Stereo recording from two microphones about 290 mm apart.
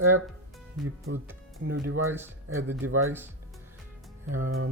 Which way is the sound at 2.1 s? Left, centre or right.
Centre.